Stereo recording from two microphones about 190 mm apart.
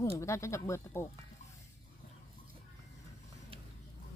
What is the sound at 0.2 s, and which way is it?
Speech, 15° left (ahead or behind).